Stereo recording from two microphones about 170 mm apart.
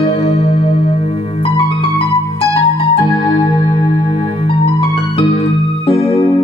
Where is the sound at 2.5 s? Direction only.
35° left (ahead or behind).